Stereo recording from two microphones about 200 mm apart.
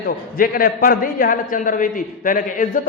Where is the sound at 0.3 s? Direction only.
45° left (ahead or behind).